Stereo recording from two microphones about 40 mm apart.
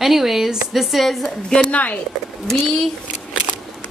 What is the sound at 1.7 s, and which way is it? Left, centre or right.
Speech, left.